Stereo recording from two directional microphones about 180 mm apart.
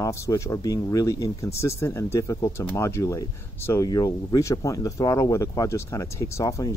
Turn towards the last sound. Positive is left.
turn(degrees=20)  # may be behind; listen again after turning